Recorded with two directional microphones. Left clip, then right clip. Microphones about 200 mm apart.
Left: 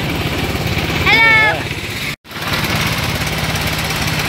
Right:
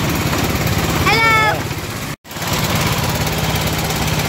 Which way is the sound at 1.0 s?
50° right (ahead or behind).